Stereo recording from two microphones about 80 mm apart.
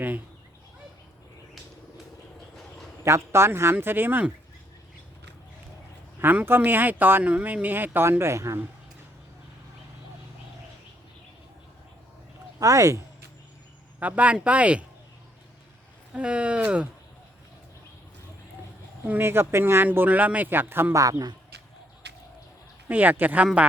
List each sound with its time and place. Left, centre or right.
2.6 s a sound: centre
3.0 s speech: right
6.1 s speech: right
12.5 s speech: right
14.0 s speech: centre
16.1 s speech: centre
19.0 s speech: right
20.9 s speech: right
22.9 s speech: right